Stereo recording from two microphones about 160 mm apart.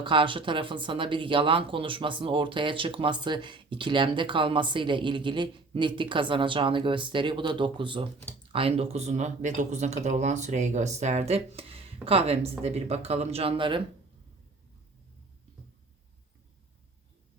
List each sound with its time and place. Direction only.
0.0 s speech: 30° right (ahead or behind)